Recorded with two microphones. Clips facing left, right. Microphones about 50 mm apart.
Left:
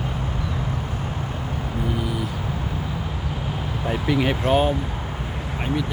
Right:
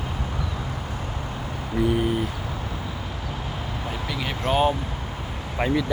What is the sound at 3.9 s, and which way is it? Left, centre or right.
Speech, left.